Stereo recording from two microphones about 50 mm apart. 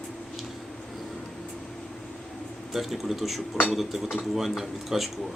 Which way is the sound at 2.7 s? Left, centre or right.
Centre.